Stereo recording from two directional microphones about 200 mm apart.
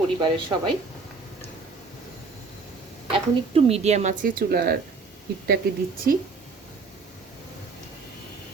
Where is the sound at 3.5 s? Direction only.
30° right (ahead or behind); by 4.8 s 50° right (ahead or behind).